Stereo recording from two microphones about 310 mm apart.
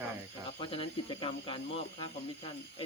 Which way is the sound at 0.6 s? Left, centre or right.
Centre.